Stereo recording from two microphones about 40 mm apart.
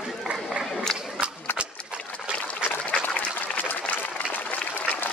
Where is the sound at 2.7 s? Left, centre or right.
Left.